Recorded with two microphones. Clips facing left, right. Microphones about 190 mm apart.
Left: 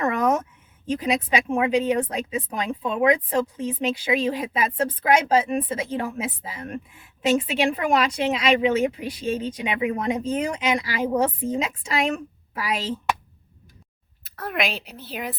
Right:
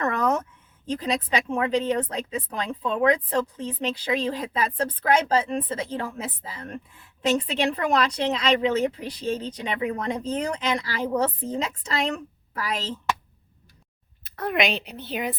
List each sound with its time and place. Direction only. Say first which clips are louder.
0.0 s a sound: left 2 dB; 10° left (ahead or behind)
0.9 s a woman's voice: left 3 dB; 10° left (ahead or behind)
14.3 s speech: right 3 dB; centre (ahead or behind)